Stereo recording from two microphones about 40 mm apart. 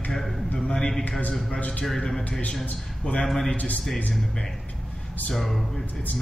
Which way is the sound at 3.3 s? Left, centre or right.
Centre.